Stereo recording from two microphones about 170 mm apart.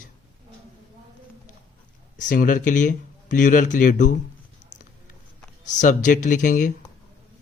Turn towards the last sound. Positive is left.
turn(degrees=50)  # may be behind; listen again after turning